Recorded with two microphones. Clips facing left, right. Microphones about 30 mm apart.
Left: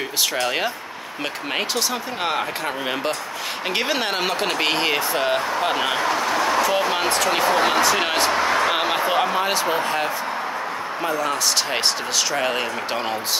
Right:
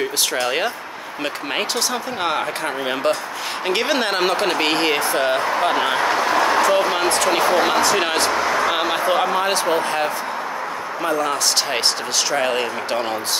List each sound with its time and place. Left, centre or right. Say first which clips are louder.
0.3 s speech: right 2 dB; centre
6.0 s speech: right 3 dB; right
6.6 s speech: right 3 dB; centre